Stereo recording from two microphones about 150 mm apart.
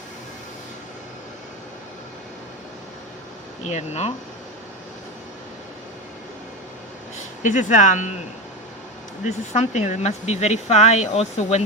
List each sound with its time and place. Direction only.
3.6 s speech: 50° left (ahead or behind)
7.4 s speech: 55° left (ahead or behind)
9.2 s speech: 50° left (ahead or behind)